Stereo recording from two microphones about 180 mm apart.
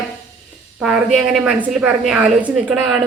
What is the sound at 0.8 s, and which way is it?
A woman's voice, centre (ahead or behind).